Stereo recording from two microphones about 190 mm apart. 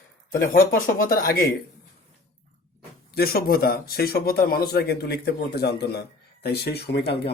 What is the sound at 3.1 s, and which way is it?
A man's voice, 55° left (ahead or behind).